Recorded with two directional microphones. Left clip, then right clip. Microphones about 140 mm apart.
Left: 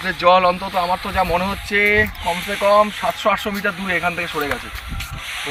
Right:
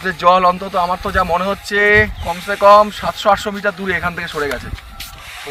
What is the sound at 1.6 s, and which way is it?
Speech, 10° right (ahead or behind).